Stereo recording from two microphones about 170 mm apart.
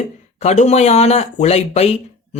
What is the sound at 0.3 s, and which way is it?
Speech, 40° left (ahead or behind).